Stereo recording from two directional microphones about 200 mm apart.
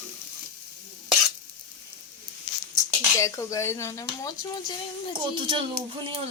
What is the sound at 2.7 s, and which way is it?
Speech, 15° left (ahead or behind).